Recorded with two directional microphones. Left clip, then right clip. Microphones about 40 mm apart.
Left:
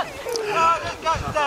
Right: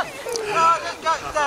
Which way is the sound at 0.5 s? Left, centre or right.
Centre.